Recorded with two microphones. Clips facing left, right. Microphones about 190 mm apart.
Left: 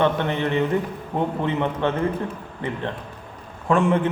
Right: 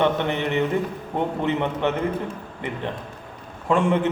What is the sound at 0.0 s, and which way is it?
Speech, 20° right (ahead or behind).